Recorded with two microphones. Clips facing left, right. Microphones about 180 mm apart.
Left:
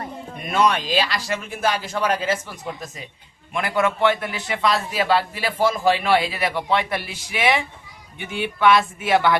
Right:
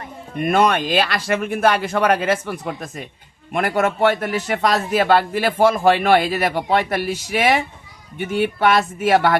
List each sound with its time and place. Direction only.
0.3 s speech: 55° right (ahead or behind)
3.5 s a man's voice: 45° right (ahead or behind)